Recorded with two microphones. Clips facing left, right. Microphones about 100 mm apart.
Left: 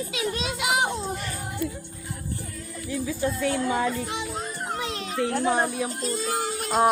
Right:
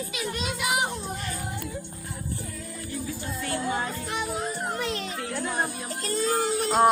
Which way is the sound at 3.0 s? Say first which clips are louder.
Left 10 dB; 90° left.